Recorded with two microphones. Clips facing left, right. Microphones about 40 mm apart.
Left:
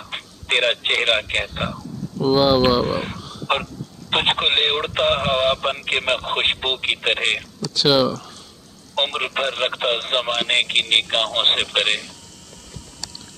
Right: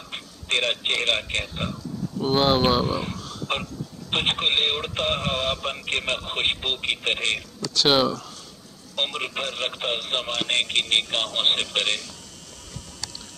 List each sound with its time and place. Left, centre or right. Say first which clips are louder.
0.1 s speech: left 4 dB; left
2.1 s speech: left 5 dB; centre
3.5 s speech: left 7 dB; left
7.7 s speech: left 3 dB; centre
8.9 s speech: left 5 dB; left